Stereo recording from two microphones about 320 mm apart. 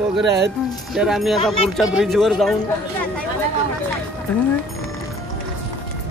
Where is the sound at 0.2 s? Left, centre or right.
Right.